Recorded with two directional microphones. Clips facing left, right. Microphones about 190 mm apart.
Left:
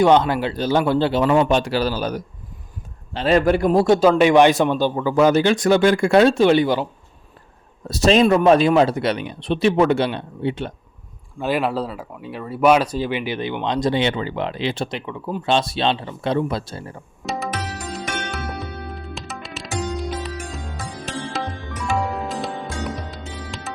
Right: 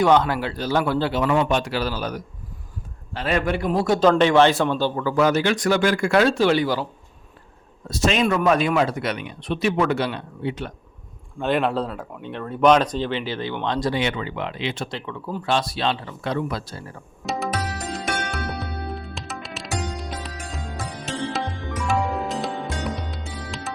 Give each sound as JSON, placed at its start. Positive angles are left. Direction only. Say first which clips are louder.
{"t": 0.0, "sound": "a man's voice", "louder": "left 3 dB", "side_deg": 20}
{"t": 4.0, "sound": "a man's voice", "louder": "even", "side_deg": 10}
{"t": 7.9, "sound": "speech", "louder": "left 6 dB", "side_deg": 35}
{"t": 11.3, "sound": "speech", "louder": "even", "side_deg": 5}
{"t": 14.8, "sound": "a man's voice", "louder": "left 3 dB", "side_deg": 15}
{"t": 17.2, "sound": "tabla", "louder": "even", "side_deg": 0}
{"t": 17.9, "sound": "music", "louder": "even", "side_deg": 0}